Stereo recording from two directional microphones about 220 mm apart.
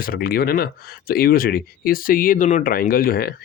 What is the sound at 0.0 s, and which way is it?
Speech, 40° left (ahead or behind).